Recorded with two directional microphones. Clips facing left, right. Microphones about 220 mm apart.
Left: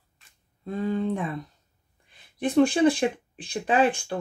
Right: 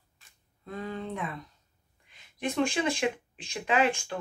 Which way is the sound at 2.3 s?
35° left (ahead or behind).